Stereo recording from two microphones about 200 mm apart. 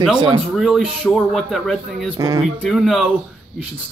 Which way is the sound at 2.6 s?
Centre (ahead or behind).